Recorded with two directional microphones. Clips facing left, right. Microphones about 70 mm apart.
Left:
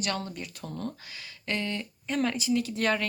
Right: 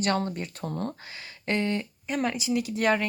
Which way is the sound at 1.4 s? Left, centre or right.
Right.